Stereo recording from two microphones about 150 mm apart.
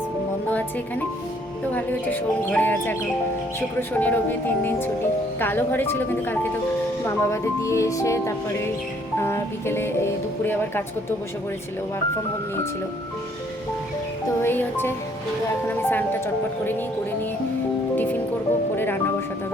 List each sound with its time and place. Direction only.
1.7 s speech: 10° left (ahead or behind)
14.4 s speech: 15° left (ahead or behind)
17.9 s music: 10° left (ahead or behind)